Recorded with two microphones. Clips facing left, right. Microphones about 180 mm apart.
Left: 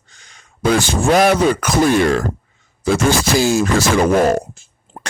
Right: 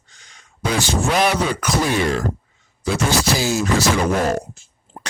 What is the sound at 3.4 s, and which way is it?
Speech, 50° left (ahead or behind).